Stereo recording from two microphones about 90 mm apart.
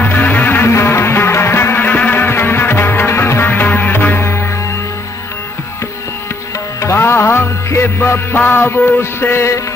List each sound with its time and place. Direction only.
0.0 s music: 20° left (ahead or behind)
6.8 s music: 30° left (ahead or behind)